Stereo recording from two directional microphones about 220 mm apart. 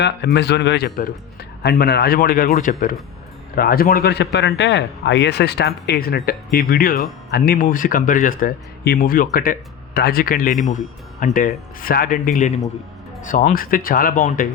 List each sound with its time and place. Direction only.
0.0 s a man's voice: 50° left (ahead or behind)